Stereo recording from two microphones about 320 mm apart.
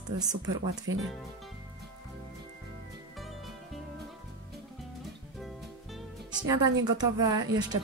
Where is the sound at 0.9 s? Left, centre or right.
Right.